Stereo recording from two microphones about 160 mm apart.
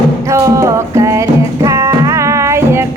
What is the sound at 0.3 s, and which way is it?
Music, 20° right (ahead or behind).